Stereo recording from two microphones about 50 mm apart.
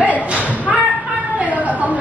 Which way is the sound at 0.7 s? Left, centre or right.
Centre.